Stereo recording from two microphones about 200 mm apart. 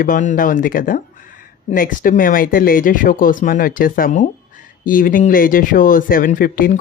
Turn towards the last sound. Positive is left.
turn(degrees=45)  # may be behind; listen again after turning